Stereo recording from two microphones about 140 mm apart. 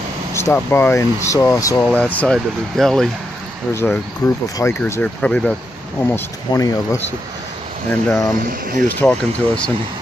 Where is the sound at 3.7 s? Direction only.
15° left (ahead or behind).